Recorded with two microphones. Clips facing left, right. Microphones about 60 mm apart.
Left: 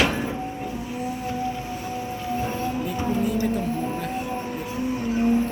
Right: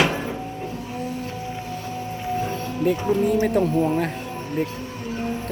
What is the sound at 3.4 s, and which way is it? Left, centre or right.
Speech, right.